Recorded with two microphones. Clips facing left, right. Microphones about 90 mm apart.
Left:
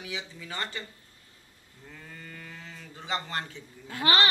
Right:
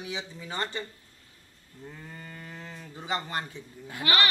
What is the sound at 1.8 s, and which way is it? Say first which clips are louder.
Sheep: right 3 dB; 15° right (ahead or behind).